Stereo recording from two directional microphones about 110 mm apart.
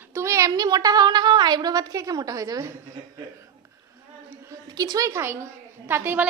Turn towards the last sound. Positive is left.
turn(degrees=-20)  # may be behind; listen again after turning